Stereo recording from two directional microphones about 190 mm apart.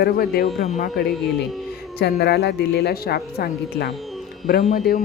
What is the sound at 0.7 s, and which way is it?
Speech, 40° left (ahead or behind).